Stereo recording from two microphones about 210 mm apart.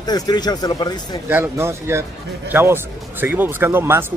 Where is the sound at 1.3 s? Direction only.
10° right (ahead or behind).